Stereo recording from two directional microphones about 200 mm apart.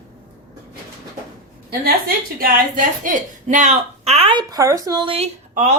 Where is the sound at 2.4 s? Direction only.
45° right (ahead or behind).